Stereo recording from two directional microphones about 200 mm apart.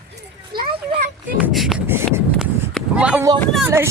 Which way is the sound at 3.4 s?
Centre (ahead or behind).